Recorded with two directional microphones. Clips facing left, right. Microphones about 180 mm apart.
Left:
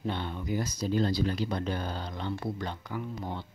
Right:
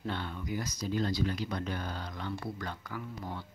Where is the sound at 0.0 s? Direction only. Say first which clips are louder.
Left 3 dB; 20° left (ahead or behind).